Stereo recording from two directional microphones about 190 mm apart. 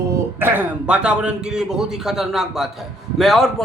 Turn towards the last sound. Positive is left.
turn(degrees=0)  # may be behind; listen again after turning